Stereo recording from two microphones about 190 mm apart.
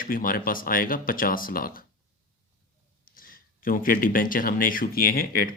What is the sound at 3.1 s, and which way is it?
Speech, 50° left (ahead or behind).